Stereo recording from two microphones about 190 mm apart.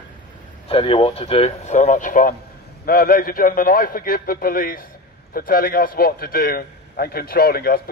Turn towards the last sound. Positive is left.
turn(degrees=55)  # may be behind; listen again after turning